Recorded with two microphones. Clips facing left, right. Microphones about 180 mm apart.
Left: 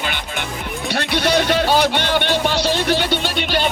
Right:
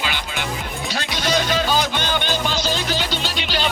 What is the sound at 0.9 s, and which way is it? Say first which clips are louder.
Music: left 5 dB; 65° left (ahead or behind).